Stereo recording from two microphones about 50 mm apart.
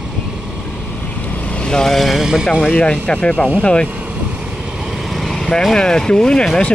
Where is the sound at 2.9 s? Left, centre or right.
Left.